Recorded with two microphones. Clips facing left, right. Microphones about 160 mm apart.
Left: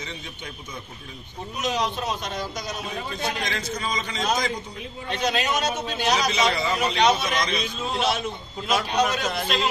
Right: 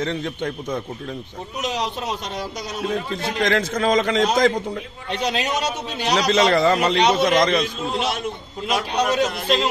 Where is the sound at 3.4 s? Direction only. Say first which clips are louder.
Right 10 dB; 90° right.